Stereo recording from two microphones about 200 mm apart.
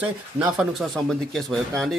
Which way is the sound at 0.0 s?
5° right (ahead or behind).